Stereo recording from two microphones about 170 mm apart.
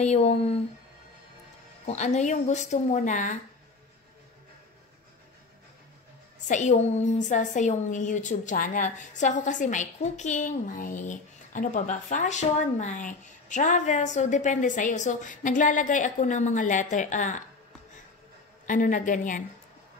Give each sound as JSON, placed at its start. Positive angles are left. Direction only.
{"t": 0.0, "sound": "speech", "side_deg": 40}
{"t": 1.9, "sound": "a woman's voice", "side_deg": 40}
{"t": 6.4, "sound": "a woman's voice", "side_deg": 45}
{"t": 18.7, "sound": "a woman's voice", "side_deg": 50}